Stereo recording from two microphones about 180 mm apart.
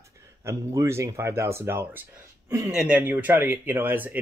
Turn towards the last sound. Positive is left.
turn(degrees=-10)  # may be behind; listen again after turning